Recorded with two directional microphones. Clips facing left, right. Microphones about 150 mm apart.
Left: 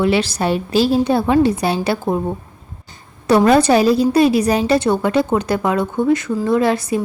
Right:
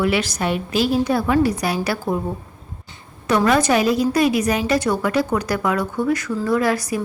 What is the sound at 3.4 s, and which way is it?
A woman's voice, 30° left (ahead or behind).